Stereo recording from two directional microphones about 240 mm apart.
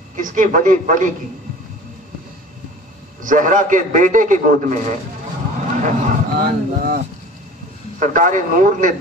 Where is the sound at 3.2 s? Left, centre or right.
Right.